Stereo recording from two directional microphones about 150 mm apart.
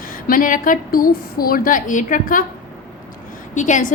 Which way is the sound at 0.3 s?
65° left (ahead or behind).